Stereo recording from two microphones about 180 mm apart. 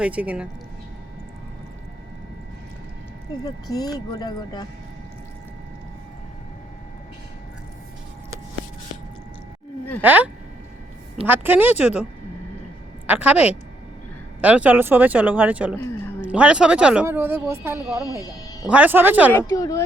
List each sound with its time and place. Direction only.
0.0 s speech: 10° right (ahead or behind)
3.4 s speech: 20° left (ahead or behind)
10.0 s speech: 10° right (ahead or behind)
11.3 s speech: 10° right (ahead or behind)
13.1 s speech: 10° right (ahead or behind)
15.7 s speech: 10° left (ahead or behind)
16.2 s speech: 5° right (ahead or behind)
18.2 s speech: 20° left (ahead or behind)
18.7 s speech: 10° right (ahead or behind)
19.3 s a woman's voice: 15° left (ahead or behind)